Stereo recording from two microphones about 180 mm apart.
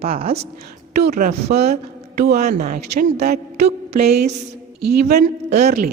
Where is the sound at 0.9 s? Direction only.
55° right (ahead or behind).